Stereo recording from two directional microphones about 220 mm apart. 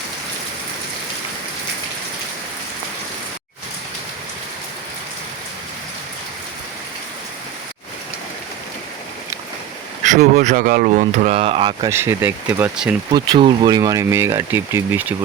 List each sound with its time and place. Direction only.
10.0 s speech: 35° right (ahead or behind)
11.9 s speech: 10° right (ahead or behind)
13.1 s speech: 20° right (ahead or behind)